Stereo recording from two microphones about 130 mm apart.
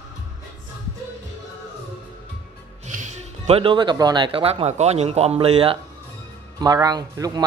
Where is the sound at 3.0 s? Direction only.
55° right (ahead or behind).